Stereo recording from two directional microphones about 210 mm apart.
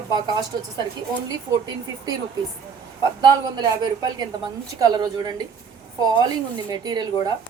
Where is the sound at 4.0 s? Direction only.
20° right (ahead or behind).